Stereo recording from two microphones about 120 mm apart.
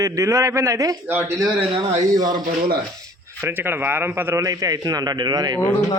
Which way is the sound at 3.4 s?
20° right (ahead or behind).